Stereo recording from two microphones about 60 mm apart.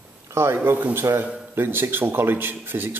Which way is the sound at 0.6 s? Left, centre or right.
Right.